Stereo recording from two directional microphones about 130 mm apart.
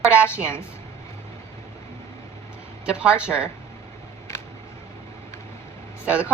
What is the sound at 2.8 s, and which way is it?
Speech, 10° right (ahead or behind).